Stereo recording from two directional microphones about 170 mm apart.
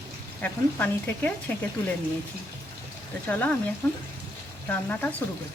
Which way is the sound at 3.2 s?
10° left (ahead or behind).